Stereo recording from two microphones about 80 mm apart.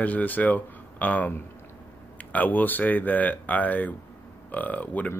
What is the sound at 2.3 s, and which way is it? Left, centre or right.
Speech, left.